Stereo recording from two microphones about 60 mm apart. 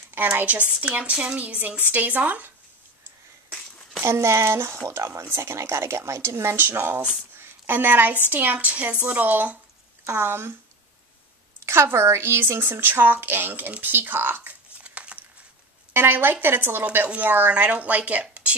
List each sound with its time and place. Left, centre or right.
0.1 s speech: right
4.0 s speech: right
5.2 s speech: right
7.3 s a sound: right
8.3 s speech: right
10.0 s speech: right
11.6 s speech: right
14.8 s crumpling: right
15.9 s speech: right
18.2 s a sound: right